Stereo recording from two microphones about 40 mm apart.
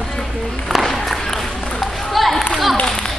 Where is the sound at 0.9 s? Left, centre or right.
Centre.